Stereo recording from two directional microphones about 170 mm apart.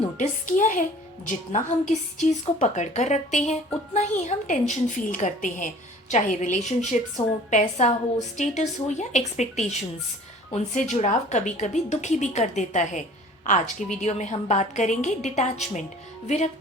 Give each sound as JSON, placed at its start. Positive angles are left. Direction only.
{"t": 0.2, "sound": "a woman's voice", "side_deg": 50}
{"t": 10.9, "sound": "a woman's voice", "side_deg": 45}